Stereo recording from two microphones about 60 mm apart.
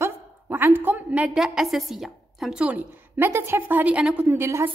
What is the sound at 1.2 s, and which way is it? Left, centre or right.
A woman's voice, centre.